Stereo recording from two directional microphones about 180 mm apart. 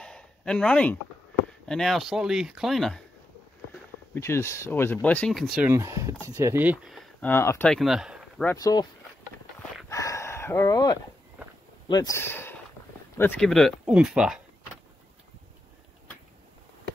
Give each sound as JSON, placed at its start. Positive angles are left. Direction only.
{"t": 0.0, "sound": "a sound", "side_deg": 5}
{"t": 1.7, "sound": "speech", "side_deg": 0}
{"t": 4.1, "sound": "speech", "side_deg": 15}
{"t": 5.7, "sound": "speech", "side_deg": -15}
{"t": 7.2, "sound": "speech", "side_deg": 15}
{"t": 8.5, "sound": "speech", "side_deg": 20}
{"t": 9.8, "sound": "chicken", "side_deg": 15}
{"t": 11.9, "sound": "speech", "side_deg": 20}